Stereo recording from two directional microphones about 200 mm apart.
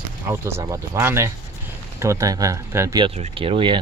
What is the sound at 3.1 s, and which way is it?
Speech, 30° right (ahead or behind).